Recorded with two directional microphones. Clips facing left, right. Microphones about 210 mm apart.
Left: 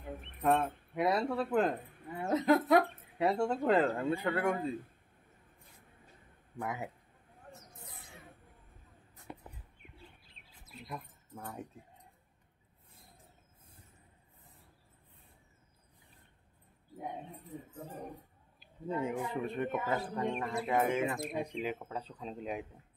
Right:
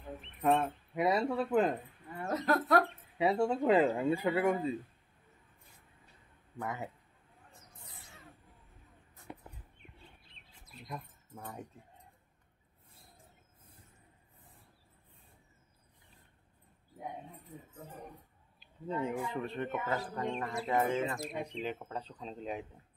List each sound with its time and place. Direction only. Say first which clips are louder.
0.5 s speech: even; centre (ahead or behind)
2.2 s speech: left 4 dB; 20° left (ahead or behind)
2.8 s speech: even; 5° right (ahead or behind)
6.6 s speech: left 1 dB; 10° left (ahead or behind)
10.3 s bird: left 2 dB; 5° left (ahead or behind)
18.6 s a sound: left 1 dB; 5° left (ahead or behind)
19.2 s speech: left 2 dB; 10° left (ahead or behind)